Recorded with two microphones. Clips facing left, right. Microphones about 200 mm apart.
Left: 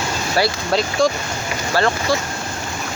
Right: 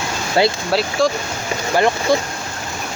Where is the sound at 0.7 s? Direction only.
5° right (ahead or behind).